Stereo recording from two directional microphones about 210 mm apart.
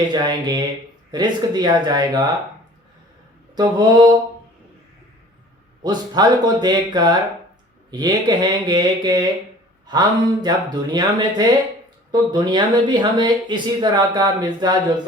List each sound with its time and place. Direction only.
0.1 s speech: 20° right (ahead or behind)
3.5 s speech: 20° right (ahead or behind)
5.8 s speech: 20° right (ahead or behind)